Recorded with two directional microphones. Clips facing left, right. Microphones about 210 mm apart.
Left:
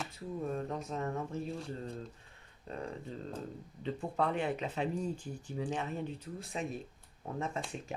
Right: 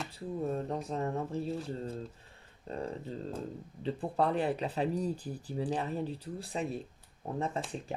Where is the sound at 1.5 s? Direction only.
Centre (ahead or behind).